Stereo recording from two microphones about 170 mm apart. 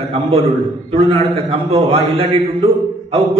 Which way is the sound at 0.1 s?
35° right (ahead or behind).